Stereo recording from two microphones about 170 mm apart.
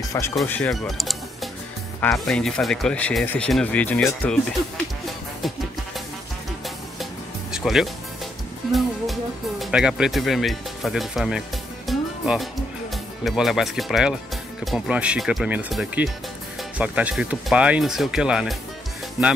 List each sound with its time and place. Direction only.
0.1 s speech: 20° left (ahead or behind)
0.5 s speech: 5° left (ahead or behind)
7.5 s speech: centre (ahead or behind)
11.9 s music: centre (ahead or behind)
12.9 s speech: centre (ahead or behind)